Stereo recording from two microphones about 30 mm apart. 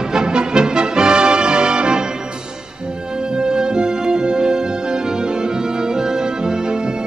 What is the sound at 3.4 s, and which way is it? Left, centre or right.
Music, right.